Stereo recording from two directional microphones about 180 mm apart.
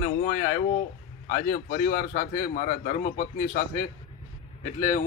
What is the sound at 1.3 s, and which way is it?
A man's voice, 55° left (ahead or behind).